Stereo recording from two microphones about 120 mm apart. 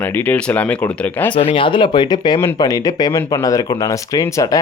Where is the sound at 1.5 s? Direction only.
45° left (ahead or behind).